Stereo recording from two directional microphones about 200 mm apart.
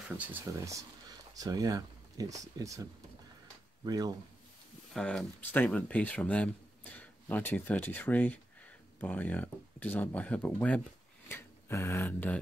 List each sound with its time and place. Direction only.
0.1 s speech: 10° right (ahead or behind)
4.9 s speech: 5° left (ahead or behind)